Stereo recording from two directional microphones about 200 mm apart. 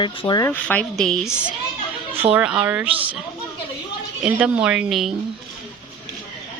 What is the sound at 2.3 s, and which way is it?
Speech, 5° right (ahead or behind).